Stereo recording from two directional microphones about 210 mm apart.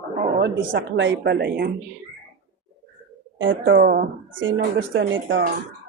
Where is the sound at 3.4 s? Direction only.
60° right (ahead or behind).